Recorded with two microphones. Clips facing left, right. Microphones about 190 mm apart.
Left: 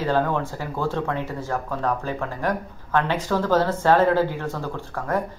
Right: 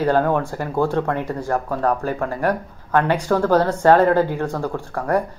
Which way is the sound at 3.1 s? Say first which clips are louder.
Right 5 dB; 50° right (ahead or behind).